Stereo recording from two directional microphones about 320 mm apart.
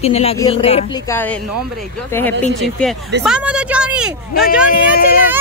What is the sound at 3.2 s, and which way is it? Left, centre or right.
Speech, centre.